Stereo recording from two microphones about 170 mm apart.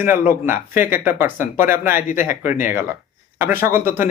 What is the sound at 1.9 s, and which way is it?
Speech, 50° left (ahead or behind).